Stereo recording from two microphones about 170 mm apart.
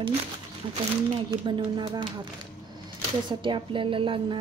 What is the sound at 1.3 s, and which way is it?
Speech, 30° right (ahead or behind).